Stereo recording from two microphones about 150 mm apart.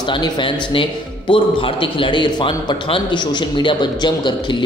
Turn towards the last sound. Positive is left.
turn(degrees=30)  # may be behind; listen again after turning